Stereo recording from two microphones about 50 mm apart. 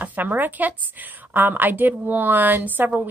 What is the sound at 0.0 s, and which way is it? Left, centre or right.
Speech, right.